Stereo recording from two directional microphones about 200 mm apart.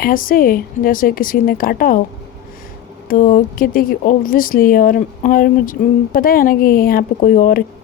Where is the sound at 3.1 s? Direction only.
40° left (ahead or behind).